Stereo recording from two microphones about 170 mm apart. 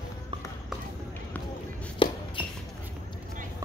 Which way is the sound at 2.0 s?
30° left (ahead or behind).